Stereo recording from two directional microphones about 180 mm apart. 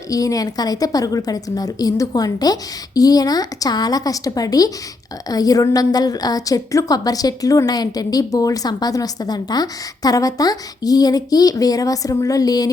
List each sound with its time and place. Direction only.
0.1 s a woman's voice: 20° left (ahead or behind)